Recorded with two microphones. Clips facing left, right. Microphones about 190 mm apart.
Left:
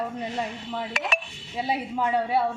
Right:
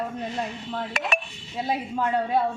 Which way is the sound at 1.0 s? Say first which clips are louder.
Right 1 dB; 50° right (ahead or behind).